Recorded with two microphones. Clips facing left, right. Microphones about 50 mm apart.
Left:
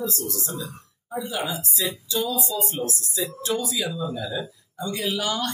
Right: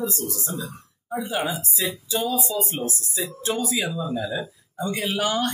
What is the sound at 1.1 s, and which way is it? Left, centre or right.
Speech, right.